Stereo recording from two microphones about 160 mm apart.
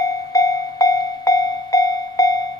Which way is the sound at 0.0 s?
20° left (ahead or behind).